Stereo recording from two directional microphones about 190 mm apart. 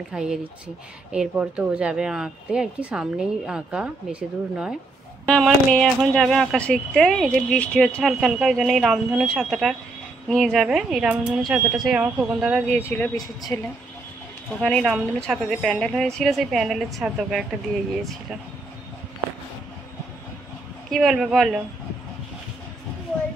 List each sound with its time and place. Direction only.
0.1 s speech: 5° right (ahead or behind)
5.2 s speech: 5° left (ahead or behind)
13.1 s speech: 20° left (ahead or behind)
14.6 s speech: 5° left (ahead or behind)
20.9 s speech: centre (ahead or behind)